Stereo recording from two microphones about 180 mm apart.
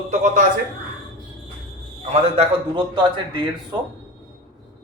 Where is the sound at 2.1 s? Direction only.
30° right (ahead or behind).